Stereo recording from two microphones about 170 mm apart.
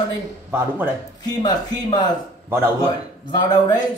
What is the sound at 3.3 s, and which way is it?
Speech, 25° left (ahead or behind).